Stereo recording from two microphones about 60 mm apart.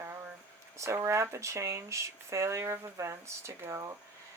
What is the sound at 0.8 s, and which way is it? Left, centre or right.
Speech, right.